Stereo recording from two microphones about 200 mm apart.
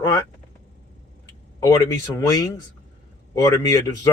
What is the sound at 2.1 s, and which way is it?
Speech, 15° left (ahead or behind).